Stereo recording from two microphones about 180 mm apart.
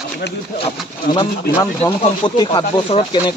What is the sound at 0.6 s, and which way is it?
Speech, 25° left (ahead or behind).